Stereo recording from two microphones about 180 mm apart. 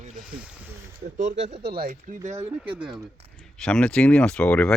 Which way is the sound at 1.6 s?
55° right (ahead or behind).